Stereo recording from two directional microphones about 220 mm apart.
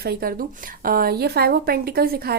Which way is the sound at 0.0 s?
45° right (ahead or behind).